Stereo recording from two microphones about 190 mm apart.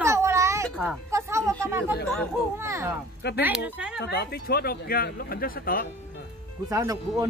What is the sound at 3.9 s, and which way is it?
Speech, 60° left (ahead or behind).